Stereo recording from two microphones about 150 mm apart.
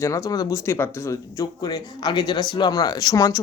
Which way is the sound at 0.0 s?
20° left (ahead or behind).